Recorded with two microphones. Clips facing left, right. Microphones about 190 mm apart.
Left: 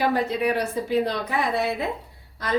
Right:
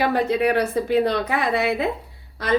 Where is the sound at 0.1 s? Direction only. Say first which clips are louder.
Right 3 dB; 65° right (ahead or behind).